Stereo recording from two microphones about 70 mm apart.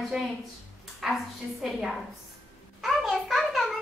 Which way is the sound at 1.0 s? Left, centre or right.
Centre.